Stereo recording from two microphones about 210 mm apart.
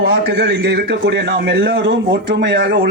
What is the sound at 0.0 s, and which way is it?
Speech, 50° right (ahead or behind).